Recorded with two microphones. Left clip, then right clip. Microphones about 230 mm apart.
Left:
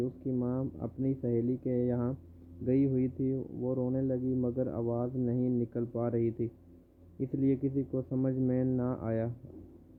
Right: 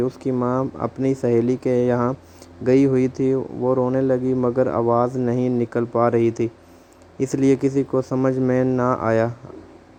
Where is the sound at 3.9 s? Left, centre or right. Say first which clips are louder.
Right 13 dB; centre.